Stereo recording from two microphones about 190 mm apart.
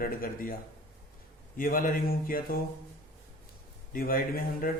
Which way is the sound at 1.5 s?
45° left (ahead or behind).